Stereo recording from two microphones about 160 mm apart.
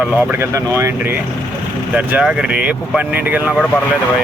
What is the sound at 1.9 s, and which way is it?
Speech, 5° right (ahead or behind).